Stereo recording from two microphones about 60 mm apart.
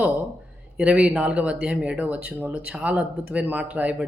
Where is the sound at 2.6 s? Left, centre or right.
Right.